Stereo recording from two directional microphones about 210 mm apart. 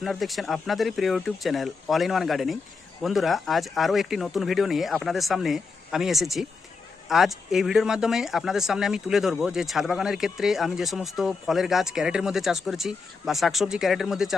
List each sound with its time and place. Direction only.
0.0 s speech: centre (ahead or behind)